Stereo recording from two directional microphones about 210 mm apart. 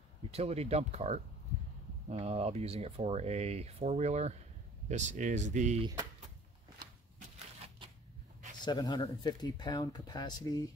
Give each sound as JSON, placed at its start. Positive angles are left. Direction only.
{"t": 0.3, "sound": "speech", "side_deg": -30}
{"t": 8.6, "sound": "speech", "side_deg": 20}